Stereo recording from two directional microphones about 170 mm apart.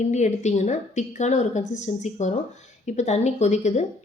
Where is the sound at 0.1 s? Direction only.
45° left (ahead or behind).